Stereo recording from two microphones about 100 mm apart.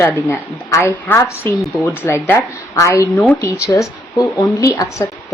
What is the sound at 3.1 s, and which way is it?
Speech, 15° left (ahead or behind).